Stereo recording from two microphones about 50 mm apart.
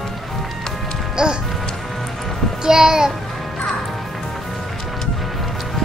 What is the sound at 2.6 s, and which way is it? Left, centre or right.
Speech, centre.